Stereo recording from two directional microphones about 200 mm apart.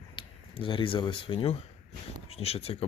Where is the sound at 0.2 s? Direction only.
25° left (ahead or behind).